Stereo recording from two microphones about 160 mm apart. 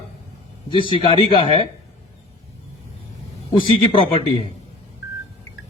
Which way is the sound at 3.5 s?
35° left (ahead or behind).